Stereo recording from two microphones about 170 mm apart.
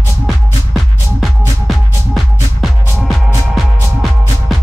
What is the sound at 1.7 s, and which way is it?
Music, centre (ahead or behind).